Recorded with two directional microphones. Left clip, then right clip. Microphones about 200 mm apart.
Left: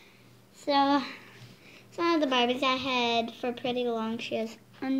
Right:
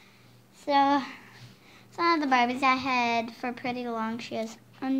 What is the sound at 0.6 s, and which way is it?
A woman's voice, 10° right (ahead or behind).